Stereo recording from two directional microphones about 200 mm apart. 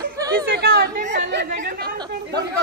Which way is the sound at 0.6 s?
50° right (ahead or behind).